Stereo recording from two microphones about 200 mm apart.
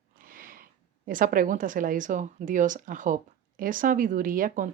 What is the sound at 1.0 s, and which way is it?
Speech, 45° right (ahead or behind).